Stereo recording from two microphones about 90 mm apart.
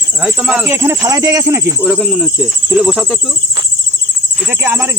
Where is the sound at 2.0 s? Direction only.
5° left (ahead or behind).